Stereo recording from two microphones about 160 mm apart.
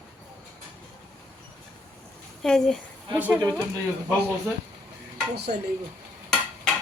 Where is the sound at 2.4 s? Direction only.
5° left (ahead or behind).